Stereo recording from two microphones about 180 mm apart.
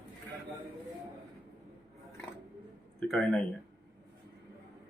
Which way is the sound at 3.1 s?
5° left (ahead or behind).